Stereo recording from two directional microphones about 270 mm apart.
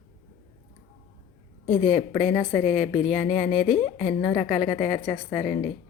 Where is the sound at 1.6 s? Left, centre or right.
Left.